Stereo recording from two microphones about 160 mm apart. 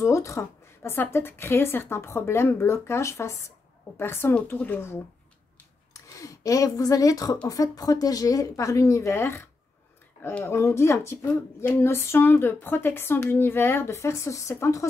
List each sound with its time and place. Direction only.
0.0 s speech: 20° left (ahead or behind)
6.0 s speech: 20° left (ahead or behind)